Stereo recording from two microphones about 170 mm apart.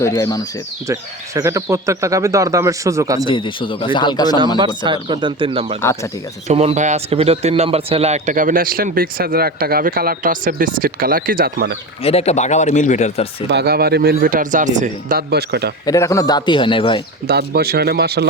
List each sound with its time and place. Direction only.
0.0 s speech: 20° left (ahead or behind)
0.9 s speech: 15° right (ahead or behind)
3.2 s speech: 30° left (ahead or behind)
4.5 s speech: 25° right (ahead or behind)
5.8 s speech: 15° left (ahead or behind)
6.5 s a man's voice: 40° right (ahead or behind); by 11.8 s 65° right (ahead or behind)
12.0 s speech: 40° left (ahead or behind)
13.5 s speech: 70° right (ahead or behind); by 14.7 s 50° right (ahead or behind)
14.8 s speech: 65° right (ahead or behind)
15.9 s speech: 20° left (ahead or behind)
17.2 s speech: 70° right (ahead or behind)